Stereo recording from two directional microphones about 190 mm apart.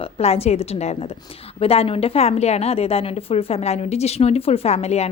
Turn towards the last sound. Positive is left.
turn(degrees=35)  # may be behind; listen again after turning